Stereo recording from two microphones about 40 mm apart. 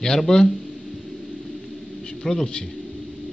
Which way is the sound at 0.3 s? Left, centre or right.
Centre.